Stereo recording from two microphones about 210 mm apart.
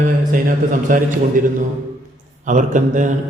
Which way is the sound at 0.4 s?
40° right (ahead or behind).